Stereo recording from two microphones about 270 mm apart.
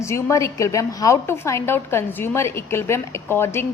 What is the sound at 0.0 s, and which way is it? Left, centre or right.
A woman's voice, centre.